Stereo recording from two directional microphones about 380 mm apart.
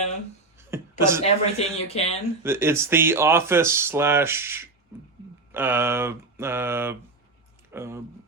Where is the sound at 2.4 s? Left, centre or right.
Centre.